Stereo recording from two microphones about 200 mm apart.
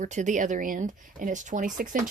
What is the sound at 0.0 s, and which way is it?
Speech, 40° right (ahead or behind).